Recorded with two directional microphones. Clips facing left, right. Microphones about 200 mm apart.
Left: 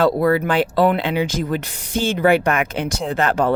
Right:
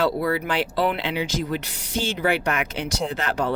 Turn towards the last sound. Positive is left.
turn(degrees=50)  # may be behind; listen again after turning